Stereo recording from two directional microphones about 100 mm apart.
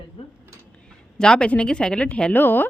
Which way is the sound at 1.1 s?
5° left (ahead or behind).